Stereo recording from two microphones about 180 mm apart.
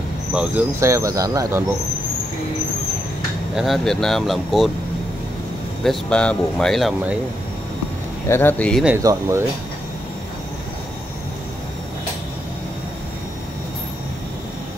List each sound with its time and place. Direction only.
0.3 s speech: 5° right (ahead or behind)
3.5 s speech: centre (ahead or behind)
5.9 s speech: 5° left (ahead or behind)
8.3 s speech: 10° left (ahead or behind)
8.8 s speech: 15° right (ahead or behind)